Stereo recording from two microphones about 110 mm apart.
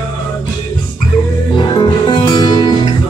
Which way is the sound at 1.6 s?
45° left (ahead or behind).